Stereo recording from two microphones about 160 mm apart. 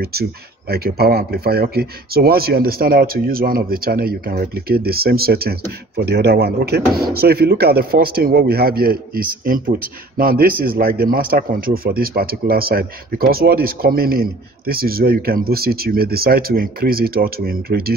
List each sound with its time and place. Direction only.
0.0 s speech: 75° right (ahead or behind)
7.0 s speech: 75° right (ahead or behind)